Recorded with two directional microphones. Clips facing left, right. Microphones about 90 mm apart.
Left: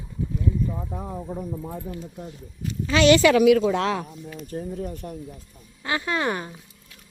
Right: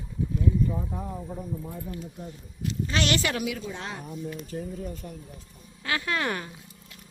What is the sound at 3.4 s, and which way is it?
Speech, 80° left.